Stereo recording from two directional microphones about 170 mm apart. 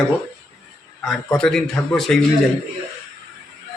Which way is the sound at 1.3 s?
5° left (ahead or behind).